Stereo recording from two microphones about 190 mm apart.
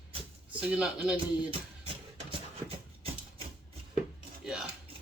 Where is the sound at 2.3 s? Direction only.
30° right (ahead or behind).